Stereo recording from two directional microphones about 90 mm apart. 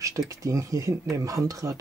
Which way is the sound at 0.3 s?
35° right (ahead or behind).